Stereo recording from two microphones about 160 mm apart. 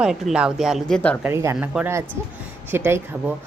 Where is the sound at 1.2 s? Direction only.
15° right (ahead or behind).